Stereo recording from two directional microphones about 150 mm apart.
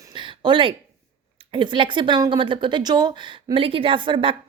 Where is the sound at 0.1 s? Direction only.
35° right (ahead or behind).